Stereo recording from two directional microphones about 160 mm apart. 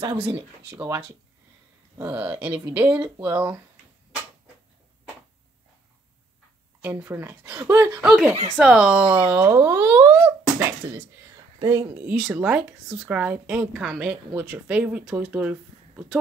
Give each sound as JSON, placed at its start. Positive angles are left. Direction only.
{"t": 0.7, "sound": "a woman's voice", "side_deg": -15}
{"t": 6.8, "sound": "a woman's voice", "side_deg": -10}
{"t": 8.0, "sound": "a woman's voice", "side_deg": -5}